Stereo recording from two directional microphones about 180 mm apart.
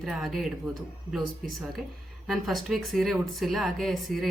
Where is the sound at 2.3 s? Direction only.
Centre (ahead or behind).